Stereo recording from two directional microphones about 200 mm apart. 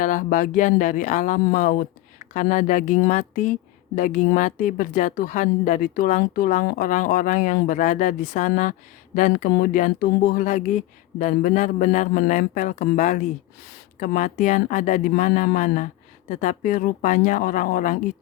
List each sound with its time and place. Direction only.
0.0 s speech: 40° left (ahead or behind)